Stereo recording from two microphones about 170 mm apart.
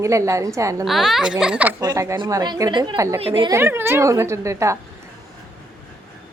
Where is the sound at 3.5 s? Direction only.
15° right (ahead or behind).